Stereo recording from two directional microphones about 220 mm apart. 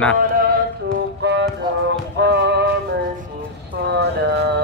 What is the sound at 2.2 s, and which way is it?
Male singing, 50° right (ahead or behind).